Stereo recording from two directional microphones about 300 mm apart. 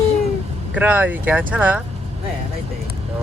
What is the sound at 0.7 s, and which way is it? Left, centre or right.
Speech, centre.